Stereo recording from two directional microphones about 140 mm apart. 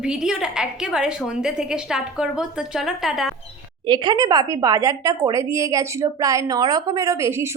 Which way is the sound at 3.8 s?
30° right (ahead or behind).